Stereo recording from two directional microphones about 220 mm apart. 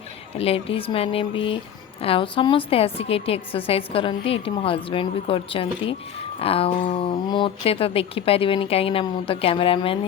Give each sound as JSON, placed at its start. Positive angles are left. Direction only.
{"t": 0.3, "sound": "a woman's voice", "side_deg": 25}